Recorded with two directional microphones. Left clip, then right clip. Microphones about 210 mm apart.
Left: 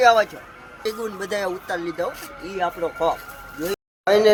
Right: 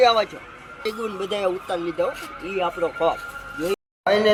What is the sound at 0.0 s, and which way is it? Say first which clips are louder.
Speech: left 2 dB; 10° left (ahead or behind).